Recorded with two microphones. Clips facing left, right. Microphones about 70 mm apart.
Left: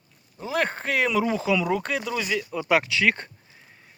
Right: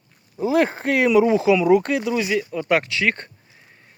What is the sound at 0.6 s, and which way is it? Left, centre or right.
Speech, centre.